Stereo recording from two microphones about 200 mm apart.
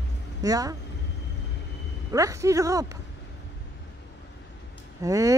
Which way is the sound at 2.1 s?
15° right (ahead or behind).